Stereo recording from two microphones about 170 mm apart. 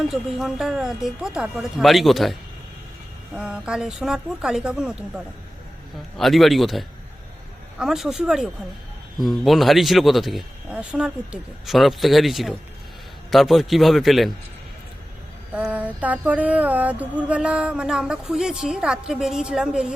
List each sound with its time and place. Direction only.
0.0 s speech: centre (ahead or behind)
3.3 s speech: 5° right (ahead or behind)
6.1 s speech: centre (ahead or behind)
15.5 s a sound: 10° right (ahead or behind)